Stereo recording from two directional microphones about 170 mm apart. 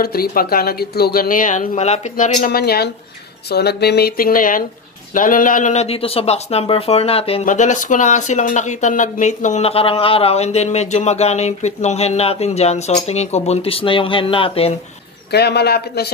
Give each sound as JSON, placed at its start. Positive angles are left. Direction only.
{"t": 0.0, "sound": "speech", "side_deg": 60}
{"t": 7.4, "sound": "speech", "side_deg": 45}
{"t": 15.3, "sound": "a man's voice", "side_deg": 75}